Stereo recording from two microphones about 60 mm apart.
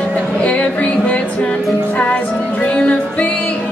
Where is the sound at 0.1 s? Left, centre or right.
Left.